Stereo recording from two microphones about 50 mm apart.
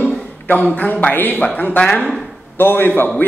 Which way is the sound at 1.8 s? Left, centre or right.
Left.